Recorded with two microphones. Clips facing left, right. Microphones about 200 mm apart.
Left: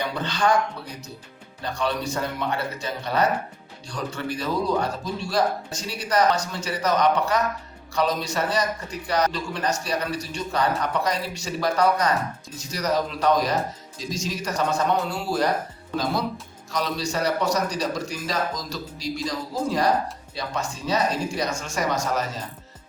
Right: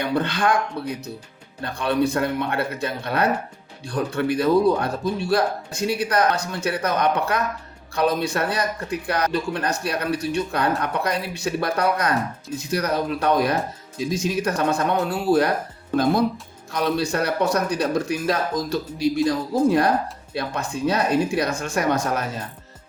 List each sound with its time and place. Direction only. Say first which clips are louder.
0.0 s speech: right 3 dB; 55° right (ahead or behind)
16.7 s speech: right 4 dB; 55° right (ahead or behind)